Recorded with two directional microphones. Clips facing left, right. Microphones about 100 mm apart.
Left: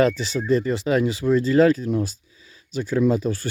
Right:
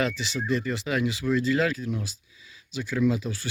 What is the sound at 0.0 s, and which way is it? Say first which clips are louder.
Speech: left 8 dB; 40° left (ahead or behind).